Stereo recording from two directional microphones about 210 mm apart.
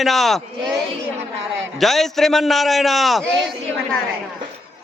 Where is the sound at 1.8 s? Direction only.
Centre (ahead or behind).